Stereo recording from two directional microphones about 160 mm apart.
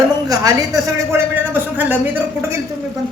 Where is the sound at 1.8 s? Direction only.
10° right (ahead or behind).